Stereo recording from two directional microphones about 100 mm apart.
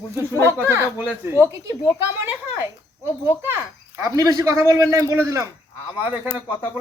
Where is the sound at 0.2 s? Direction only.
25° right (ahead or behind).